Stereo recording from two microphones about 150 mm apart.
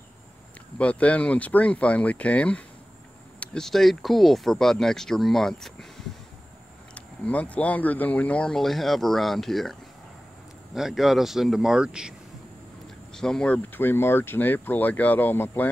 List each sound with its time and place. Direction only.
0.7 s speech: 10° left (ahead or behind)
7.2 s speech: 10° left (ahead or behind)
13.1 s speech: 5° left (ahead or behind)